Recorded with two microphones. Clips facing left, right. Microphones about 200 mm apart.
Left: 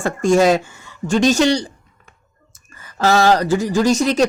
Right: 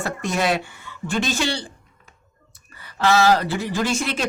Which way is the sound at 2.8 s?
45° left (ahead or behind).